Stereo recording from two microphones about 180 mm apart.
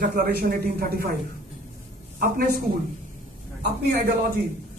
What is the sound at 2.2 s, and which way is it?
Speech, 55° right (ahead or behind).